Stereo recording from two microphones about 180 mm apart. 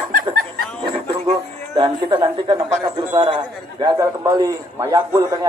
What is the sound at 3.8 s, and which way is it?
A man's voice, 20° right (ahead or behind).